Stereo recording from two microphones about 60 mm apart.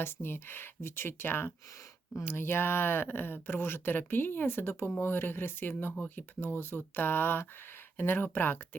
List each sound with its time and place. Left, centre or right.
0.0 s speech: left